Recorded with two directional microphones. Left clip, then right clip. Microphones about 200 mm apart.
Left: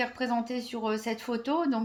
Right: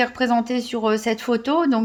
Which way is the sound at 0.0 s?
35° right (ahead or behind).